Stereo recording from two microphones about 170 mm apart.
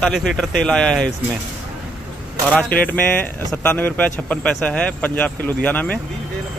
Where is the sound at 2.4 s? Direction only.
10° left (ahead or behind).